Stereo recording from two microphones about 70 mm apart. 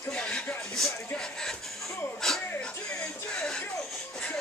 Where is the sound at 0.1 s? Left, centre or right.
Centre.